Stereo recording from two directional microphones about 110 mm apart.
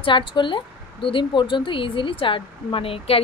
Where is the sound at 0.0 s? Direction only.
50° left (ahead or behind).